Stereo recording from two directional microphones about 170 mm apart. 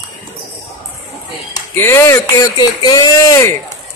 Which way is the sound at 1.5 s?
15° left (ahead or behind).